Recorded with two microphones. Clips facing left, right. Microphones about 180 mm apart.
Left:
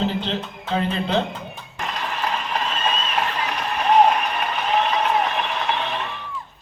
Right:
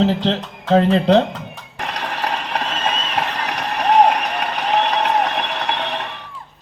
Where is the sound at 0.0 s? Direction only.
90° right.